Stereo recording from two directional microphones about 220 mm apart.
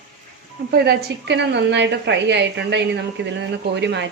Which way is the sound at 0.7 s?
45° right (ahead or behind).